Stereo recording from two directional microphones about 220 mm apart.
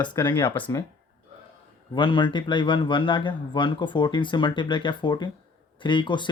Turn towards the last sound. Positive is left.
turn(degrees=20)  # may be behind; listen again after turning